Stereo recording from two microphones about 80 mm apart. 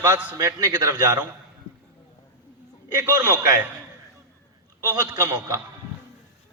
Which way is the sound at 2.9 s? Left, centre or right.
Right.